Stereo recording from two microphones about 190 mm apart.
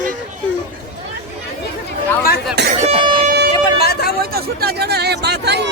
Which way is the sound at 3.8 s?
55° left (ahead or behind).